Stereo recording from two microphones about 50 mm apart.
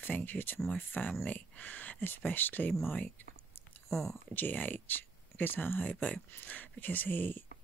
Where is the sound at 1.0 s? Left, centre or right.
Left.